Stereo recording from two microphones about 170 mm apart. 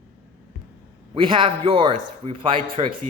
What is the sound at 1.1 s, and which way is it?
A man's voice, 30° right (ahead or behind).